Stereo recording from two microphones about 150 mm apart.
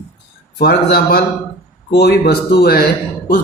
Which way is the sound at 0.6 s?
90° left.